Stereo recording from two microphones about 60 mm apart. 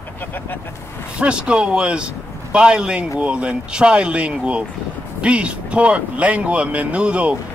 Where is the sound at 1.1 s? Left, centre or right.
Centre.